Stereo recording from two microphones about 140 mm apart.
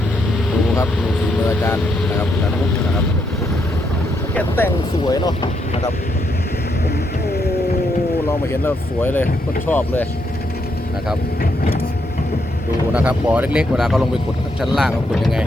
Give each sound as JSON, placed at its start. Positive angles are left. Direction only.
{"t": 1.5, "sound": "speech", "side_deg": 15}
{"t": 4.4, "sound": "speech", "side_deg": 15}
{"t": 5.0, "sound": "speech", "side_deg": 30}
{"t": 8.3, "sound": "speech", "side_deg": 15}
{"t": 12.9, "sound": "speech", "side_deg": -10}